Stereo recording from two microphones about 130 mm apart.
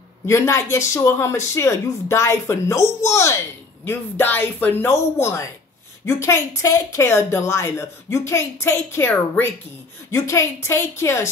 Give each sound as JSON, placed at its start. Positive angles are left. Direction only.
{"t": 0.3, "sound": "speech", "side_deg": 20}